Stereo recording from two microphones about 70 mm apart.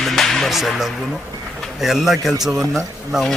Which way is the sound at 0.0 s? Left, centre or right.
Centre.